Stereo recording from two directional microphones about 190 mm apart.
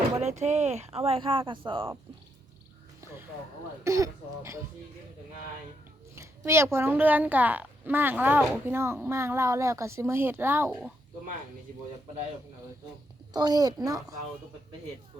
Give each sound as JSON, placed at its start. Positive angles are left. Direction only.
{"t": 0.2, "sound": "speech", "side_deg": -35}
{"t": 3.0, "sound": "a sound", "side_deg": -15}
{"t": 3.8, "sound": "speech", "side_deg": -15}
{"t": 6.1, "sound": "speech", "side_deg": -15}
{"t": 13.3, "sound": "a woman's voice", "side_deg": -20}